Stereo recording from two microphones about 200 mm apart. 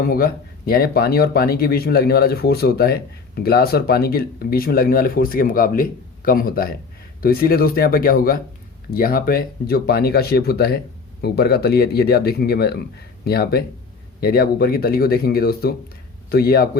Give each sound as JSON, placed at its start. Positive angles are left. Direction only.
{"t": 0.0, "sound": "speech", "side_deg": 50}